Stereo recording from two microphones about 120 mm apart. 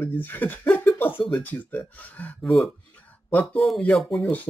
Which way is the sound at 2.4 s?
Centre (ahead or behind).